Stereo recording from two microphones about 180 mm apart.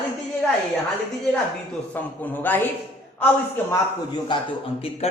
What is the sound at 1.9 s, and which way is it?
A man's voice, 10° left (ahead or behind).